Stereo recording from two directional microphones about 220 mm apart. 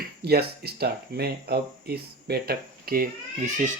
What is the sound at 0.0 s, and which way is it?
Speech, 45° right (ahead or behind).